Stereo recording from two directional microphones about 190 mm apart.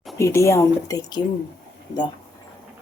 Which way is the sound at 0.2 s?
15° left (ahead or behind).